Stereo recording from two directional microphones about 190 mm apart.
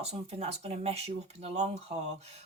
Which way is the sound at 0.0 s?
35° right (ahead or behind).